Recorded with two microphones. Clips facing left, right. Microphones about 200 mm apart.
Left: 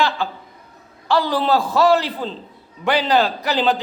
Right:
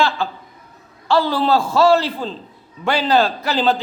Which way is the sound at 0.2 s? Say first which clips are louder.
Right 1 dB; 15° left (ahead or behind).